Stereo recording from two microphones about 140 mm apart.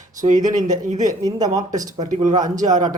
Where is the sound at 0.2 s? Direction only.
65° right (ahead or behind).